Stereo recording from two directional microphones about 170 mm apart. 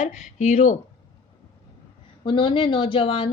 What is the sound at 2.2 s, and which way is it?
Speech, 30° left (ahead or behind).